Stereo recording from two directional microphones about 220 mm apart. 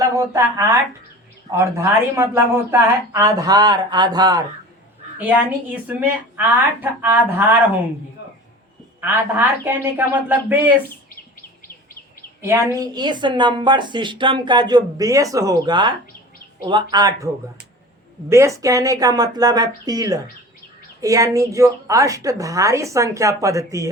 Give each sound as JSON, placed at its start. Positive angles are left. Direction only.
{"t": 0.0, "sound": "speech", "side_deg": -15}
{"t": 5.1, "sound": "speech", "side_deg": -10}
{"t": 9.0, "sound": "speech", "side_deg": -10}
{"t": 10.8, "sound": "a sound", "side_deg": 40}
{"t": 12.4, "sound": "a woman's voice", "side_deg": -15}